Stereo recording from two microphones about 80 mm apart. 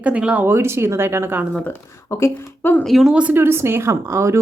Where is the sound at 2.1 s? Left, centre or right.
Left.